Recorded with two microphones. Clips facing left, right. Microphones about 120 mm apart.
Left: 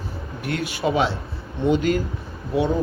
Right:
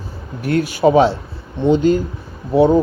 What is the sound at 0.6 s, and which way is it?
Speech, centre (ahead or behind).